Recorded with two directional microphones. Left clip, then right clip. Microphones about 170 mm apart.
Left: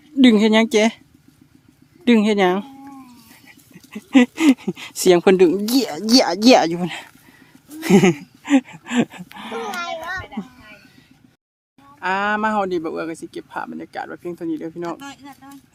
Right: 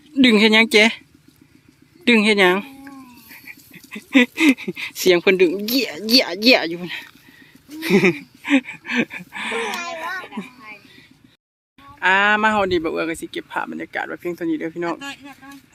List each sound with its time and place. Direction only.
0.2 s speech: 15° left (ahead or behind)
2.0 s speech: 15° left (ahead or behind); by 7.1 s 35° left (ahead or behind)
7.9 s a sound: 25° left (ahead or behind)
9.3 s a child's voice: 5° left (ahead or behind)
11.9 s speech: centre (ahead or behind)
14.9 s a sound: 20° left (ahead or behind)